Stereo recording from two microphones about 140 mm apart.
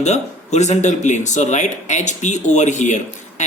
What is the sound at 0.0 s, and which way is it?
Speech, 55° left (ahead or behind).